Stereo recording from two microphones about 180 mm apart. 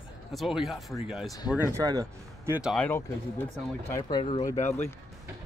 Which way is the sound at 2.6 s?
Centre (ahead or behind).